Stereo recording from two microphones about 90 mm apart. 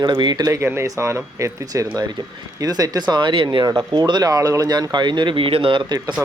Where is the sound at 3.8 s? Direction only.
55° right (ahead or behind); by 5.9 s 70° right (ahead or behind).